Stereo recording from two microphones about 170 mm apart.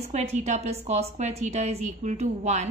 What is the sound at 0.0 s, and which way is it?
A woman's voice, 40° right (ahead or behind).